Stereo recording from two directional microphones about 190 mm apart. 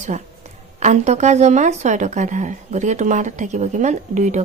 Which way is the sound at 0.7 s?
35° right (ahead or behind).